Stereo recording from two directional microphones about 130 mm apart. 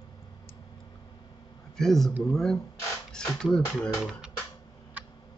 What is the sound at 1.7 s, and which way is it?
A man's voice, centre (ahead or behind).